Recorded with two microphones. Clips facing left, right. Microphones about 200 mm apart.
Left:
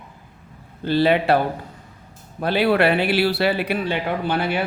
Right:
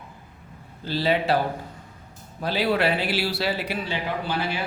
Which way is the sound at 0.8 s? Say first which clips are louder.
Left 6 dB; 60° left (ahead or behind).